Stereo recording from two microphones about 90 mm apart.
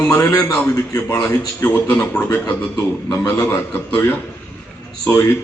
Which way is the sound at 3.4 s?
20° left (ahead or behind).